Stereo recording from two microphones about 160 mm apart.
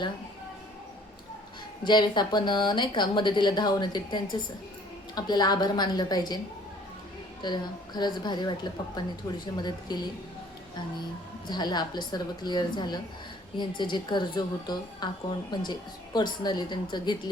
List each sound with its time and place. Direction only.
1.8 s a woman's voice: 30° left (ahead or behind)
7.4 s a woman's voice: 25° left (ahead or behind)
11.4 s a woman's voice: 25° left (ahead or behind)